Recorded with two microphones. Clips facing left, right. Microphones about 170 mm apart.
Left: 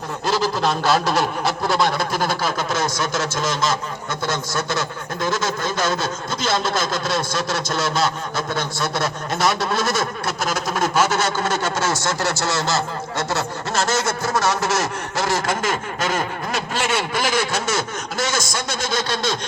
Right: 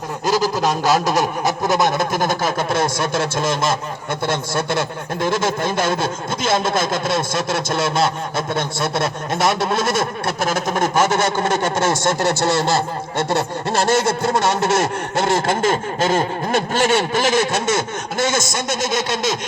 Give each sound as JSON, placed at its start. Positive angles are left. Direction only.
{"t": 0.3, "sound": "a man's voice", "side_deg": -40}
{"t": 0.5, "sound": "a man's voice", "side_deg": -15}
{"t": 2.4, "sound": "speech", "side_deg": -55}
{"t": 4.3, "sound": "speech", "side_deg": -30}
{"t": 6.5, "sound": "a man's voice", "side_deg": -50}
{"t": 6.7, "sound": "speech", "side_deg": -25}
{"t": 10.4, "sound": "a man's voice", "side_deg": -50}
{"t": 11.3, "sound": "a man's voice", "side_deg": -15}
{"t": 11.6, "sound": "a man's voice", "side_deg": -55}
{"t": 12.4, "sound": "a man's voice", "side_deg": -30}
{"t": 16.5, "sound": "a man's voice", "side_deg": -50}
{"t": 16.9, "sound": "speech", "side_deg": -25}